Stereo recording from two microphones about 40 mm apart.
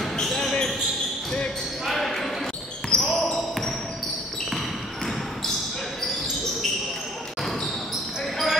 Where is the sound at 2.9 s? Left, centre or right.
Left.